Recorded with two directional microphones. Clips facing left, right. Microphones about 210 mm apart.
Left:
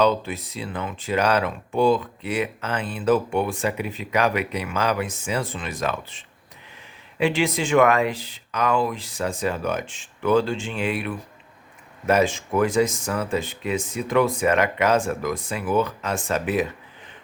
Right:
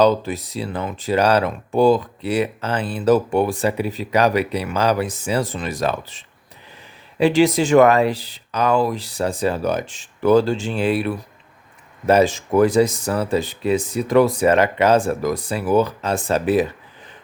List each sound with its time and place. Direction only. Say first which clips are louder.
0.0 s speech: right 4 dB; 40° right (ahead or behind)